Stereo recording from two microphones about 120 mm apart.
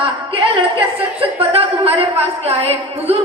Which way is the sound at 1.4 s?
50° right (ahead or behind).